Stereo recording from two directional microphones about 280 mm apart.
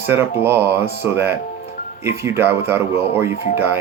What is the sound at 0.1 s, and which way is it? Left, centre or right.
Speech, centre.